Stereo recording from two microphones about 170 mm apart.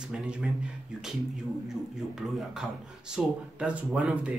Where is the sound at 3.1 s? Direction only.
5° right (ahead or behind).